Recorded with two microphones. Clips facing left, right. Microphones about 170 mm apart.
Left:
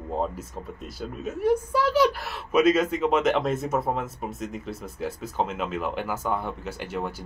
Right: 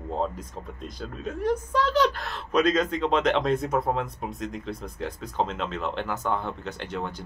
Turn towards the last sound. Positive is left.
turn(degrees=5)  # may be behind; listen again after turning